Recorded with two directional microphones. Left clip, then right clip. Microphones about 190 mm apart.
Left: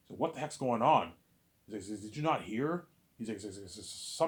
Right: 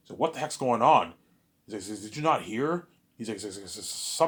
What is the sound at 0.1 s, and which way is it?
Speech, 30° right (ahead or behind).